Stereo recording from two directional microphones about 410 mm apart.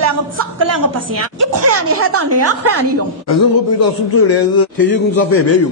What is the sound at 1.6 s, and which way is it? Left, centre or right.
A woman's voice, right.